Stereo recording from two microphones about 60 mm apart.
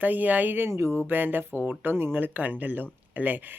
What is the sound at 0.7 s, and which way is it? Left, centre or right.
Speech, right.